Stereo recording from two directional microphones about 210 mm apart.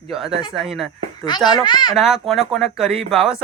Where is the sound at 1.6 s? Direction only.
20° left (ahead or behind).